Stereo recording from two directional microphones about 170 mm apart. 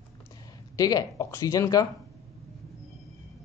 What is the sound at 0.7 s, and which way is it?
Speech, 20° left (ahead or behind).